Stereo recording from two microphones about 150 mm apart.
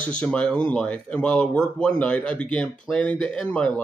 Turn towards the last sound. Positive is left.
turn(degrees=5)  # may be behind; listen again after turning